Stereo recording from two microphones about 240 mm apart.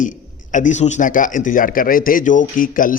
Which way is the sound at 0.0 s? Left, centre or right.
Left.